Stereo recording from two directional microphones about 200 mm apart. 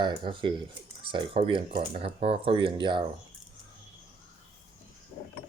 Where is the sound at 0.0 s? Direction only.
25° right (ahead or behind).